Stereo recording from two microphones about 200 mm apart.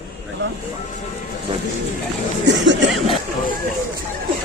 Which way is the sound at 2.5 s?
60° right (ahead or behind).